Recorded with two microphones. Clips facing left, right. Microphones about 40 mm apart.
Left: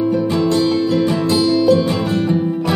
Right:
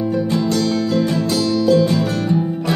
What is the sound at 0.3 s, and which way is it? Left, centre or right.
Music, left.